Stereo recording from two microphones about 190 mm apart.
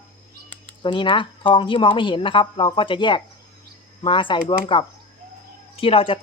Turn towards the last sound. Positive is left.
turn(degrees=30)  # may be behind; listen again after turning